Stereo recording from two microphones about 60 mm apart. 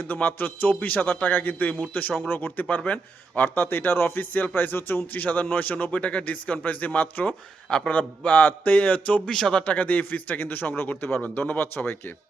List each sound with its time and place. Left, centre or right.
0.1 s a man's voice: left
9.3 s speech: centre
9.7 s a man's voice: left